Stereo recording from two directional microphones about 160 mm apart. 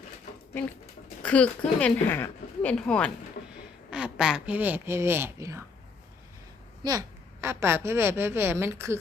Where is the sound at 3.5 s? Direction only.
5° right (ahead or behind).